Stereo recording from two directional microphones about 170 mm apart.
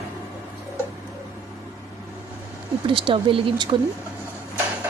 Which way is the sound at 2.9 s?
30° right (ahead or behind).